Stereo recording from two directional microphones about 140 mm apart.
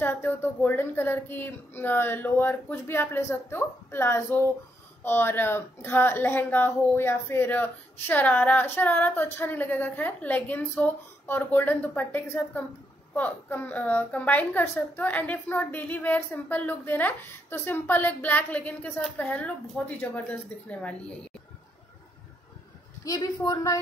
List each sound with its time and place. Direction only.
0.0 s a woman's voice: 15° left (ahead or behind)
23.0 s a woman's voice: 25° left (ahead or behind)